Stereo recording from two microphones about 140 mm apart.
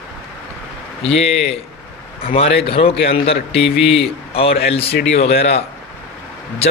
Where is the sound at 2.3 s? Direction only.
45° left (ahead or behind).